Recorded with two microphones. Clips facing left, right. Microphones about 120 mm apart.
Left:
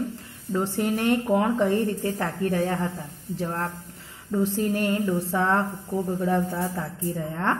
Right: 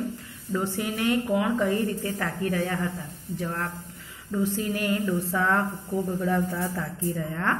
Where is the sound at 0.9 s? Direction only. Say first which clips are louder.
Left 2 dB; 40° left (ahead or behind).